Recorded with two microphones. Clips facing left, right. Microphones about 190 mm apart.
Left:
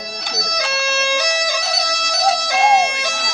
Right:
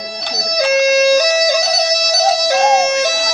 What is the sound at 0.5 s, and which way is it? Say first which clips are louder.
Music: right 12 dB; 40° right (ahead or behind).